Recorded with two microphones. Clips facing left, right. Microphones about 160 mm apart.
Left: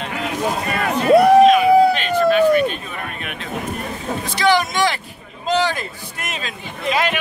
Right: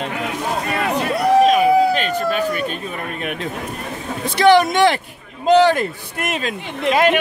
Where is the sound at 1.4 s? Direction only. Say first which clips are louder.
Left 2 dB; 40° right (ahead or behind).